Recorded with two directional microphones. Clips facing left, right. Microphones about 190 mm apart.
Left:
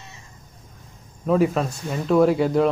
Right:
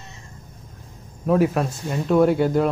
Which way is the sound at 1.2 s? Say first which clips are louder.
Even; 5° right (ahead or behind).